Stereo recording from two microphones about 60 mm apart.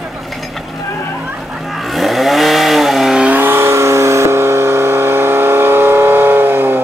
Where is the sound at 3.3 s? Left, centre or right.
Right.